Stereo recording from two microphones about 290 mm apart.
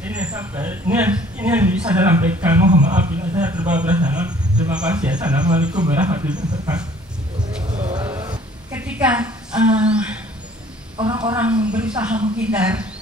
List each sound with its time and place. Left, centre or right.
0.0 s speech: centre
7.6 s a sound: centre
8.8 s a woman's voice: centre
11.0 s a woman's voice: centre
11.6 s speech: centre